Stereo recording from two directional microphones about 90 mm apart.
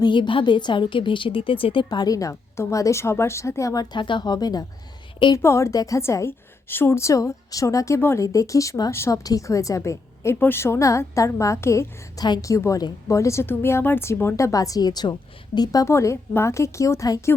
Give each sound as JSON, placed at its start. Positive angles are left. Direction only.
{"t": 0.0, "sound": "a woman's voice", "side_deg": 65}
{"t": 3.9, "sound": "speech", "side_deg": 60}
{"t": 5.4, "sound": "a woman's voice", "side_deg": 30}
{"t": 12.2, "sound": "speech", "side_deg": 50}
{"t": 12.5, "sound": "a woman's voice", "side_deg": 35}
{"t": 15.9, "sound": "a woman's voice", "side_deg": 30}